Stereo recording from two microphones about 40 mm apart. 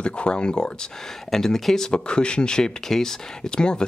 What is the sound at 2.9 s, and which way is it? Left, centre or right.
Speech, centre.